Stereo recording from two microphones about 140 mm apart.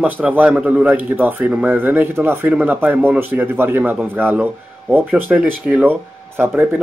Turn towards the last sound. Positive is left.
turn(degrees=-15)  # may be behind; listen again after turning